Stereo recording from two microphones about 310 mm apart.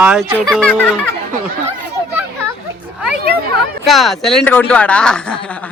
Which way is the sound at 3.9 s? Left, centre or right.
Centre.